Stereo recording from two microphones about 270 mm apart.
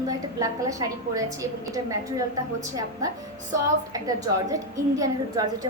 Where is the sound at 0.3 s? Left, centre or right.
Centre.